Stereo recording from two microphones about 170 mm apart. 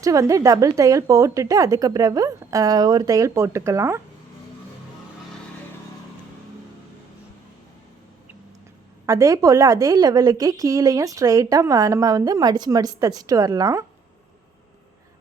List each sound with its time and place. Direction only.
0.0 s a woman's voice: 20° right (ahead or behind)
9.0 s a woman's voice: 20° right (ahead or behind)